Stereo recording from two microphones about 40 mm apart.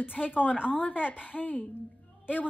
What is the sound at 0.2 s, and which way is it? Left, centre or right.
A woman's voice, left.